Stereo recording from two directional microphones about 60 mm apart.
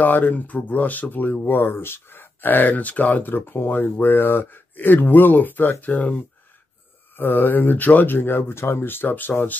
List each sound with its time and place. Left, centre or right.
0.0 s speech: left
7.2 s speech: left